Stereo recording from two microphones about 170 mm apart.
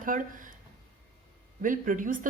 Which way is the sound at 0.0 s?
50° right (ahead or behind).